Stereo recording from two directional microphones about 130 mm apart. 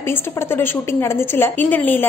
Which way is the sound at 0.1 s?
15° left (ahead or behind).